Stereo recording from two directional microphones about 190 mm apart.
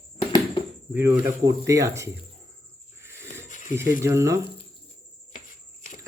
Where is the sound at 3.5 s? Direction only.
40° left (ahead or behind).